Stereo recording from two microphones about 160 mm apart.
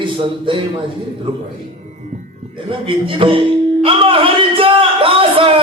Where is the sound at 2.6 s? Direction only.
35° right (ahead or behind).